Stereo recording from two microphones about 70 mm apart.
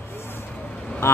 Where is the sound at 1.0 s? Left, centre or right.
Left.